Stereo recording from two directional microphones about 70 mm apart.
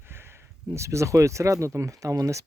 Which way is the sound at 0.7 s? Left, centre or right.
Right.